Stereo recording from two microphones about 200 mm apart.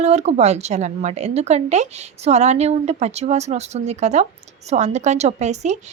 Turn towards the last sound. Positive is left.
turn(degrees=-35)  # may be behind; listen again after turning